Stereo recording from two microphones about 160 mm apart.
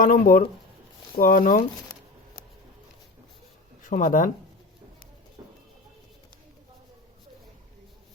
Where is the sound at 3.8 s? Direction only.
55° left (ahead or behind).